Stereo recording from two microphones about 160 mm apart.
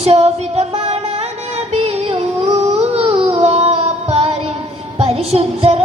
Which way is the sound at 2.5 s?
40° right (ahead or behind).